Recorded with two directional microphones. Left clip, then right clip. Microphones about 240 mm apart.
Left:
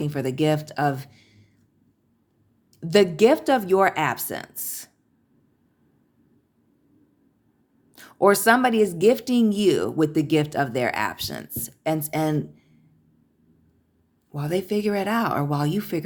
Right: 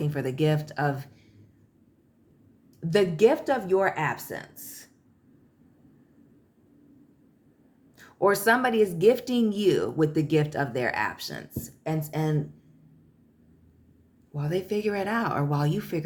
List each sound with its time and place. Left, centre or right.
0.0 s speech: left
2.8 s speech: left
7.9 s speech: left
14.3 s speech: left